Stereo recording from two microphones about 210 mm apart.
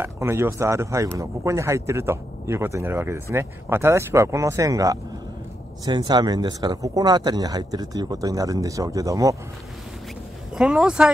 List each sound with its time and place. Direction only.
0.0 s speech: 10° right (ahead or behind)
10.5 s speech: 5° right (ahead or behind)